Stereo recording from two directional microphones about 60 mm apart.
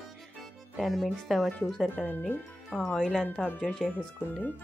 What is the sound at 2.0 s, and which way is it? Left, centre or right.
Speech, left.